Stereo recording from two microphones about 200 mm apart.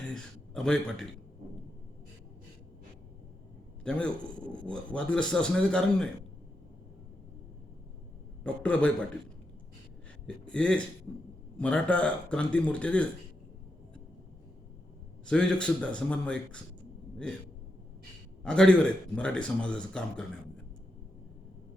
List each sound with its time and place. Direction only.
0.1 s a man's voice: 5° left (ahead or behind)
3.8 s speech: 5° left (ahead or behind)
8.4 s speech: 5° left (ahead or behind)
10.2 s speech: 5° left (ahead or behind)
15.3 s speech: 5° left (ahead or behind)
18.4 s speech: 5° left (ahead or behind)